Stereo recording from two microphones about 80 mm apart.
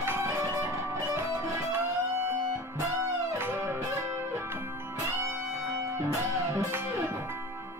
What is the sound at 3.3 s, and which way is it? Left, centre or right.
Music, right.